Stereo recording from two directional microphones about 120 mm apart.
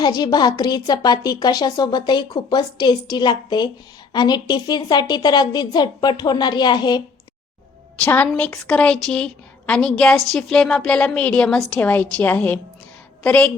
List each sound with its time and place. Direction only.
0.0 s a woman's voice: 35° left (ahead or behind)
7.9 s a woman's voice: 15° left (ahead or behind)